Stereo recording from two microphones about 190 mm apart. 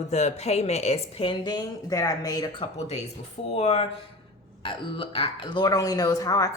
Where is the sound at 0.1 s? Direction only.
35° left (ahead or behind); by 2.6 s 20° left (ahead or behind).